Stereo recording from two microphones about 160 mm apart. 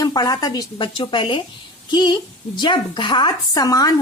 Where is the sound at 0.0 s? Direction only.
25° left (ahead or behind).